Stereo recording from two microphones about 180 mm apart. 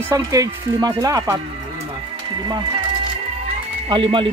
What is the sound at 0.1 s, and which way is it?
Speech, 20° right (ahead or behind).